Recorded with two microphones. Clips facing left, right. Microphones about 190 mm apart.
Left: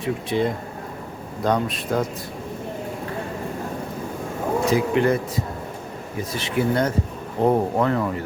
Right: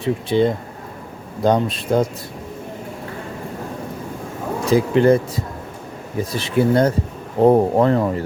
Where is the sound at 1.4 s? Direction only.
30° right (ahead or behind).